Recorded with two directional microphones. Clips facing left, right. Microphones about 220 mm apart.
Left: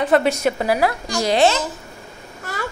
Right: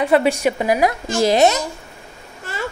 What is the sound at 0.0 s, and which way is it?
A woman's voice, 10° right (ahead or behind).